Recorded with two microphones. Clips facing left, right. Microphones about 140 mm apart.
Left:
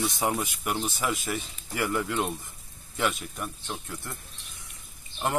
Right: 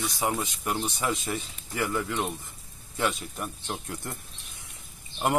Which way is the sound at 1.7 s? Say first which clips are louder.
Left 1 dB; 10° left (ahead or behind).